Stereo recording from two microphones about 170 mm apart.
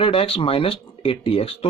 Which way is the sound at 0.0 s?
30° left (ahead or behind).